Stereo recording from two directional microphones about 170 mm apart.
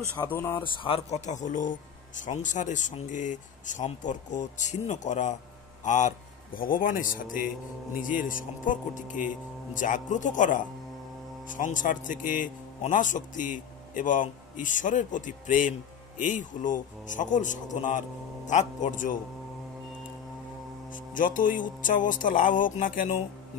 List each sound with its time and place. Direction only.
0.3 s speech: 15° left (ahead or behind)
0.7 s speech: 35° left (ahead or behind); by 19.1 s 50° left (ahead or behind)
20.9 s speech: 50° left (ahead or behind)